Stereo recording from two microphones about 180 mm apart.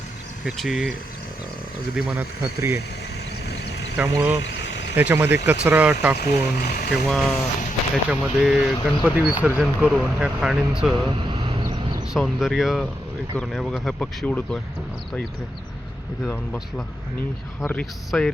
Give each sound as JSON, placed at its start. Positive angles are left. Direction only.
{"t": 0.4, "sound": "speech", "side_deg": 0}
{"t": 2.0, "sound": "speech", "side_deg": -5}
{"t": 3.4, "sound": "a sound", "side_deg": 70}
{"t": 4.1, "sound": "speech", "side_deg": -10}
{"t": 4.4, "sound": "a sound", "side_deg": 80}
{"t": 4.9, "sound": "speech", "side_deg": -10}
{"t": 6.1, "sound": "speech", "side_deg": 55}
{"t": 6.9, "sound": "speech", "side_deg": 0}
{"t": 12.1, "sound": "speech", "side_deg": 0}
{"t": 16.2, "sound": "speech", "side_deg": 5}